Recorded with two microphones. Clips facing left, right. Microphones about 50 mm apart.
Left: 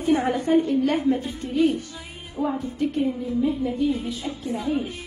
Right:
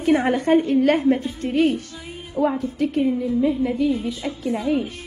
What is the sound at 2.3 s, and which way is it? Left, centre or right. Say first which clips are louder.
A woman's voice: right 5 dB; right.